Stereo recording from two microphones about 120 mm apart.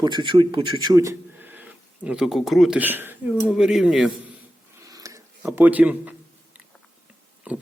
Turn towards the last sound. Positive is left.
turn(degrees=-15)  # may be behind; listen again after turning